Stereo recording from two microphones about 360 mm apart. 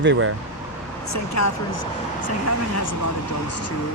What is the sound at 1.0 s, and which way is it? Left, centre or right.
Speech, left.